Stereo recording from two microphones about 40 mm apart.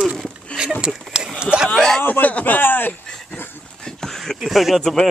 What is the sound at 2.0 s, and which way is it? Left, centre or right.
Speech, left.